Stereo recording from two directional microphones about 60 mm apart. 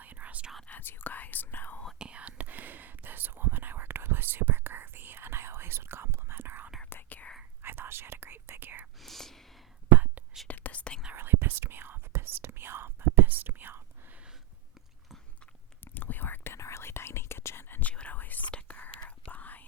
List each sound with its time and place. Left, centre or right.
0.0 s whispering: right
0.7 s whispering: left
2.0 s whispering: right
6.9 s whispering: left
7.6 s whispering: right
9.0 s whispering: centre
10.5 s whispering: left
11.1 s whispering: right
15.8 s whispering: left
16.6 s whispering: left
17.7 s whispering: left